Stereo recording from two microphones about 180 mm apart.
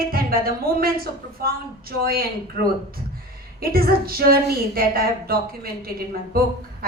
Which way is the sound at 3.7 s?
55° right (ahead or behind).